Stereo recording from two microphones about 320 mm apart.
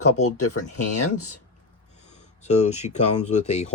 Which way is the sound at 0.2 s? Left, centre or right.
Left.